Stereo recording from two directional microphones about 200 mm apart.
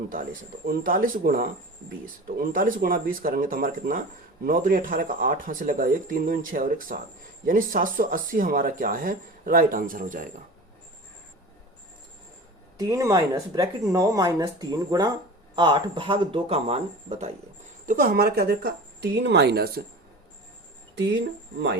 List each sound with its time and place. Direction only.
0.7 s speech: 45° right (ahead or behind)
12.7 s speech: 15° right (ahead or behind)
17.8 s speech: 45° right (ahead or behind)
20.9 s speech: 60° right (ahead or behind)